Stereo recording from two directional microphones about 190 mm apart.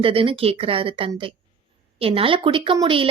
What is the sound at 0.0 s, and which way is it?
A woman's voice, 30° right (ahead or behind).